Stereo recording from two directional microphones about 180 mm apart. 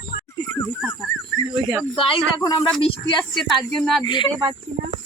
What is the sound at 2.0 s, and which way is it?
Speech, 30° left (ahead or behind).